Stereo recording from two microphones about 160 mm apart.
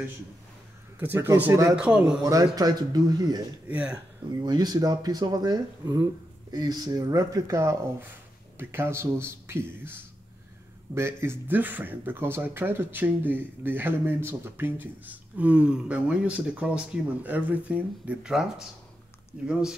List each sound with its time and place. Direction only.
0.9 s speech: 15° right (ahead or behind)
1.8 s speech: 5° right (ahead or behind)
2.2 s speech: 20° right (ahead or behind)
3.6 s speech: 10° right (ahead or behind)
4.4 s speech: 25° right (ahead or behind)
11.0 s speech: 15° right (ahead or behind)